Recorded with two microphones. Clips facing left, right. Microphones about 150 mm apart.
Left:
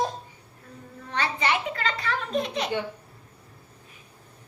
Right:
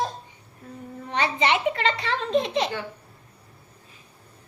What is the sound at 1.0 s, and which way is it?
A child's voice, 20° right (ahead or behind).